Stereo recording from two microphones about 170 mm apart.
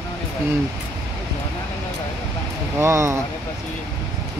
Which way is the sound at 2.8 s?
15° right (ahead or behind).